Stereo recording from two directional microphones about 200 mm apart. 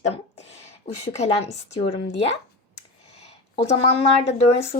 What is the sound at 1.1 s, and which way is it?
Speech, 35° left (ahead or behind).